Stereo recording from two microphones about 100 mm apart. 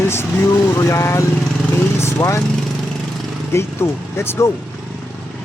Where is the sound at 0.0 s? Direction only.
25° left (ahead or behind).